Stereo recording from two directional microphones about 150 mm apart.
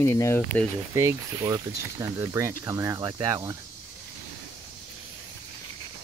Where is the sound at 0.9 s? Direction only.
20° right (ahead or behind).